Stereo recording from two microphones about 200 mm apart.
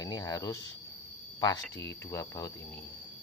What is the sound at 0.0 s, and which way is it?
Cricket, 20° left (ahead or behind).